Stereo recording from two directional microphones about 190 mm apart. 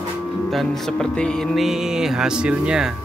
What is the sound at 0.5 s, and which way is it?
Speech, centre (ahead or behind).